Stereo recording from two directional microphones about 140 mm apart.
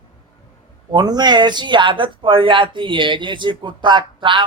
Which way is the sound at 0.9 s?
30° right (ahead or behind).